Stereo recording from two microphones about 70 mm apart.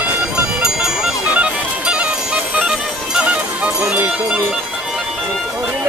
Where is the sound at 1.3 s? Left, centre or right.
Centre.